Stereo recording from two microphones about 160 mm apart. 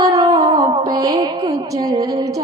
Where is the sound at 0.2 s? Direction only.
25° right (ahead or behind).